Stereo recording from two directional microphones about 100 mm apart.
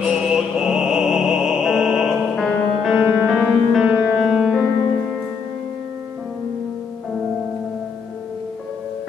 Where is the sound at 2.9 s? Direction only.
15° right (ahead or behind).